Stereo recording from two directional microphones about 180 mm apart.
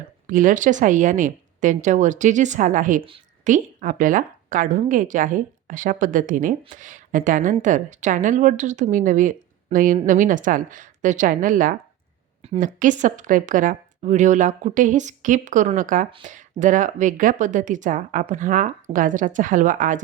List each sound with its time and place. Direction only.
0.3 s a woman's voice: 45° right (ahead or behind)